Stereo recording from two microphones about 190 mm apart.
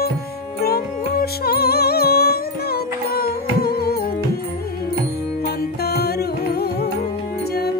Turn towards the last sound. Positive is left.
turn(degrees=60)  # may be behind; listen again after turning